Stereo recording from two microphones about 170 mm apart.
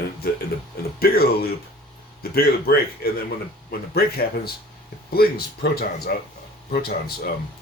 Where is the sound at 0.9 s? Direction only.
65° left (ahead or behind).